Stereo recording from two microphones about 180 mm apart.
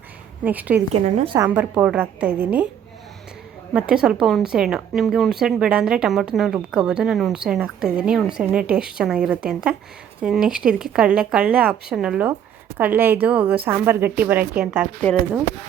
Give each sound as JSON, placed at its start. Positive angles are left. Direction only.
{"t": 0.4, "sound": "a woman's voice", "side_deg": -10}
{"t": 1.0, "sound": "a woman's voice", "side_deg": -35}
{"t": 1.4, "sound": "a woman's voice", "side_deg": -10}
{"t": 3.7, "sound": "a woman's voice", "side_deg": -5}